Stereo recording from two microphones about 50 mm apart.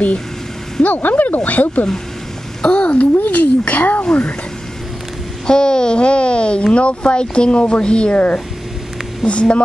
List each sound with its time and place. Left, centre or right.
0.8 s a child's voice: left
2.6 s a child's voice: left
4.0 s speech: left
5.5 s speech: centre